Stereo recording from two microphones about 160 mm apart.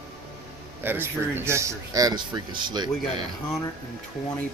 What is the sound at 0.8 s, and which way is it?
Speech, 15° right (ahead or behind).